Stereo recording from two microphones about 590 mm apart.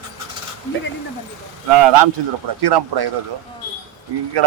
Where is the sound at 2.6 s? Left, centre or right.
Right.